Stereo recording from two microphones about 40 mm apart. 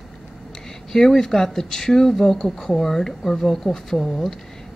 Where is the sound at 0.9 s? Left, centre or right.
Centre.